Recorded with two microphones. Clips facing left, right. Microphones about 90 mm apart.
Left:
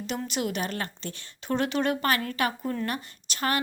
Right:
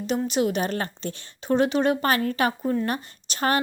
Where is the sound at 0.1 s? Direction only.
20° right (ahead or behind).